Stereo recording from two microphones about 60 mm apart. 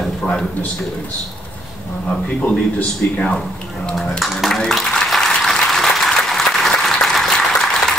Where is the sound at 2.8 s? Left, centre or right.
Left.